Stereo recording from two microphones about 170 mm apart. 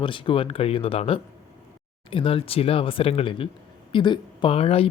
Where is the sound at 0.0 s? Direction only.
30° left (ahead or behind).